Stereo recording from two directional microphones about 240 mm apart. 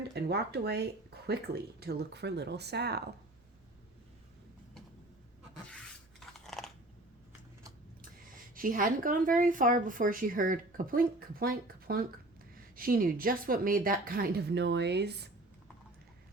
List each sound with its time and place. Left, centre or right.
0.1 s speech: right
5.7 s scissors: centre
8.0 s a woman's voice: right